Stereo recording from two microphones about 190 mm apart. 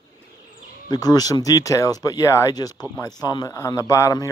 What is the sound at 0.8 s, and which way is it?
Speech, 20° left (ahead or behind).